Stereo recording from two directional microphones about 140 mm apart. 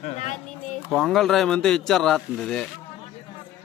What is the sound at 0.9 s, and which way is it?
Speech, centre (ahead or behind).